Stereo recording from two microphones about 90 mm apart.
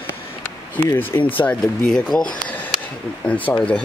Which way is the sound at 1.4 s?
10° left (ahead or behind).